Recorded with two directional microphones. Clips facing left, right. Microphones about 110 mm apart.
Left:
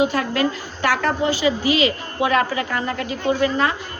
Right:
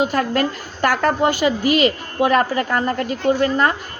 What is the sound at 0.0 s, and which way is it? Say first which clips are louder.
A man's voice: right 1 dB; 45° right (ahead or behind).